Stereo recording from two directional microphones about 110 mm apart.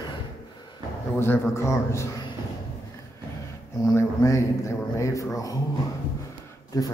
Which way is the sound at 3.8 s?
30° left (ahead or behind).